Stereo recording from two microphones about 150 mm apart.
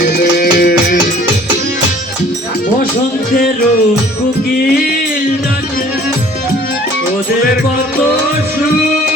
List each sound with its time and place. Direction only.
0.0 s music: 90° left